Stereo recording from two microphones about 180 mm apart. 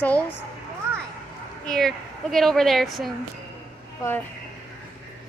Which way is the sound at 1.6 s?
5° left (ahead or behind).